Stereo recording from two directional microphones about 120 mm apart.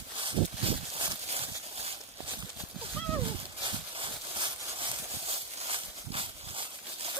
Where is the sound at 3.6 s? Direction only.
45° right (ahead or behind).